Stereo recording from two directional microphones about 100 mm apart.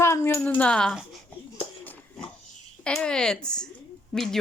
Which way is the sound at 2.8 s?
10° left (ahead or behind).